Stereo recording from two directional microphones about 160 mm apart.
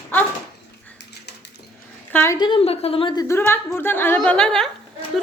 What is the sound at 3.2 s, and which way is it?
A woman's voice, 15° left (ahead or behind).